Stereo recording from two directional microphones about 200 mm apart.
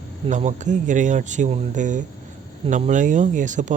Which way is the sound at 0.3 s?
35° right (ahead or behind).